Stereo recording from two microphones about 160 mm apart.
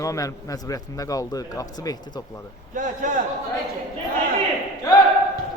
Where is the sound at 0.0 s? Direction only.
20° left (ahead or behind).